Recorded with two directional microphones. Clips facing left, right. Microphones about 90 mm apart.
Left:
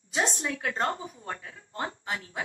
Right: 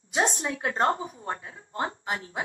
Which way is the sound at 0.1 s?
30° right (ahead or behind).